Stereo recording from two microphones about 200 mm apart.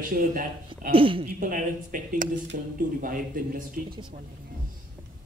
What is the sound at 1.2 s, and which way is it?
Speech, 45° right (ahead or behind).